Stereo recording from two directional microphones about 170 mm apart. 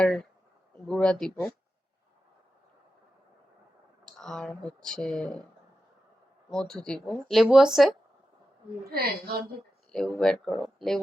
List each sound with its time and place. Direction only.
0.0 s speech: 5° left (ahead or behind)
4.0 s speech: 5° left (ahead or behind)
6.5 s speech: 5° left (ahead or behind)
8.8 s a woman's voice: 65° right (ahead or behind)
9.9 s speech: 5° left (ahead or behind)